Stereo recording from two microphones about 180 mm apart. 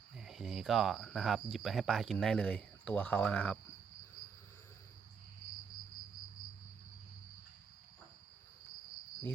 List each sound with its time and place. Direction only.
0.2 s speech: centre (ahead or behind)